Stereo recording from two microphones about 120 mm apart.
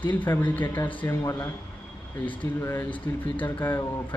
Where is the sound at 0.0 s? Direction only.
15° left (ahead or behind).